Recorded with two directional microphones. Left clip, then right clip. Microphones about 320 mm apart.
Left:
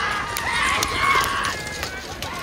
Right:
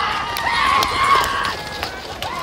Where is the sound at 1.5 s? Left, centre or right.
Centre.